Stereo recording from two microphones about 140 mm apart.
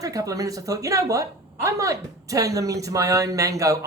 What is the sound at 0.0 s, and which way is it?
A woman's voice, 25° right (ahead or behind).